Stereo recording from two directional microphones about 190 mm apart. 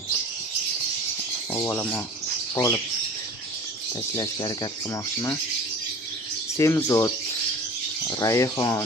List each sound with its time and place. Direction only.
1.5 s speech: 10° left (ahead or behind)
4.1 s speech: 20° left (ahead or behind)
6.6 s speech: 15° left (ahead or behind)